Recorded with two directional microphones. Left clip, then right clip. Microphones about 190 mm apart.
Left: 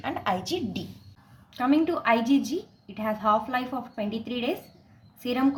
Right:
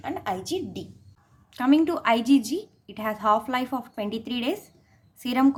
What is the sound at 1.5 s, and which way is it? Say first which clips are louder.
A woman's voice: right 2 dB; 35° right (ahead or behind).